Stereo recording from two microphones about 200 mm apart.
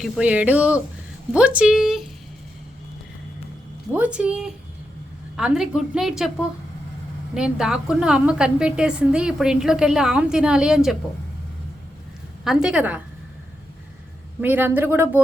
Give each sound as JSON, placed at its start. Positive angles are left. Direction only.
{"t": 0.0, "sound": "a woman's voice", "side_deg": -5}
{"t": 3.9, "sound": "a woman's voice", "side_deg": -5}
{"t": 7.3, "sound": "a woman's voice", "side_deg": -5}
{"t": 12.5, "sound": "a woman's voice", "side_deg": -5}
{"t": 14.4, "sound": "speech", "side_deg": -10}